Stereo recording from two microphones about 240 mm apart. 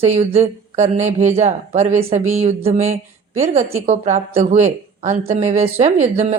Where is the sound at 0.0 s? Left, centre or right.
Right.